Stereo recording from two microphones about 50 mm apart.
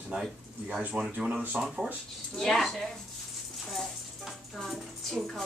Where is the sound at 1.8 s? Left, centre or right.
Centre.